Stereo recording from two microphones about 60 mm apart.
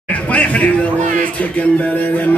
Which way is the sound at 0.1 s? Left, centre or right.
Left.